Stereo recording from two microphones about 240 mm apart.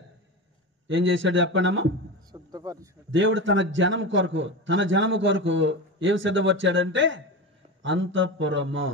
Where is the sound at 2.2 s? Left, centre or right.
Centre.